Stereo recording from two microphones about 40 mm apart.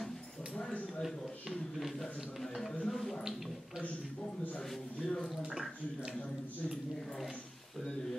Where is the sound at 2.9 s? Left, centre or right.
Centre.